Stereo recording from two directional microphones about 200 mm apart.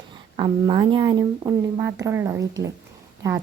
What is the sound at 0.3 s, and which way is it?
A woman's voice, 25° right (ahead or behind).